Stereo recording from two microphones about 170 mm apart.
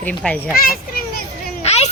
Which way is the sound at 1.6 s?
40° left (ahead or behind).